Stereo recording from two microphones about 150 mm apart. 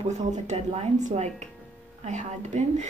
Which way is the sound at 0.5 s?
45° right (ahead or behind).